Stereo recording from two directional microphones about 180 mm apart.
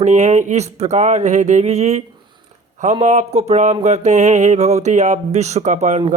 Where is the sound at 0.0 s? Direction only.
40° right (ahead or behind).